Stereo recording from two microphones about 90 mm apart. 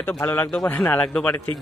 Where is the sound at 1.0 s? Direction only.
10° left (ahead or behind).